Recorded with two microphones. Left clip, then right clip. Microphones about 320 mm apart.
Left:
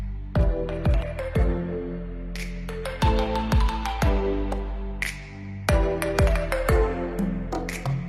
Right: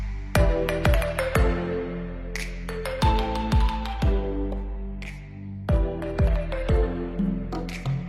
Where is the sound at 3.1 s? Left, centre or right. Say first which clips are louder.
Left 1 dB; centre.